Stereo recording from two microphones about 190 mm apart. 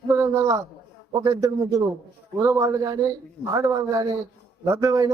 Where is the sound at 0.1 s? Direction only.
15° right (ahead or behind).